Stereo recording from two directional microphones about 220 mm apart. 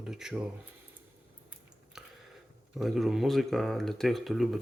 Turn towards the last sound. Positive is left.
turn(degrees=0)  # may be behind; listen again after turning